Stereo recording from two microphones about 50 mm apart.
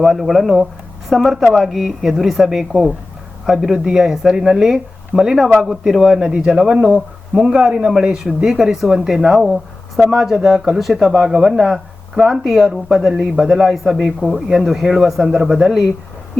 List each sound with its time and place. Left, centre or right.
0.0 s speech: centre